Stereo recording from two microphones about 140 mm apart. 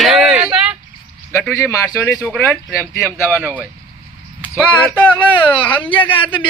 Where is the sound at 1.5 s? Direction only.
20° left (ahead or behind).